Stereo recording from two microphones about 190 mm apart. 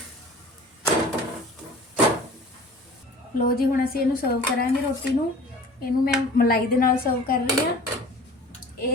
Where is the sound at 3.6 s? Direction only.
55° left (ahead or behind).